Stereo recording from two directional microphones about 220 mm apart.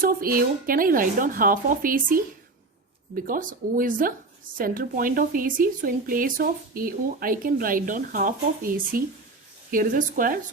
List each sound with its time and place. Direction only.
0.0 s speech: 40° right (ahead or behind)
3.2 s speech: 40° right (ahead or behind)